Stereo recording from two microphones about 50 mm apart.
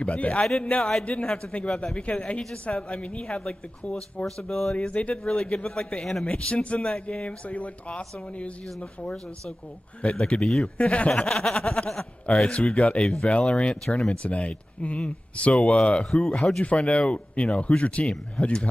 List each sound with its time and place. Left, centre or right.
0.0 s a man's voice: left
4.4 s a man's voice: centre
4.7 s speech: left
5.3 s a man's voice: centre
6.3 s speech: left
6.9 s a man's voice: centre
7.2 s speech: left
10.0 s a man's voice: centre
10.6 s a man's voice: left
13.0 s speech: centre
13.3 s speech: left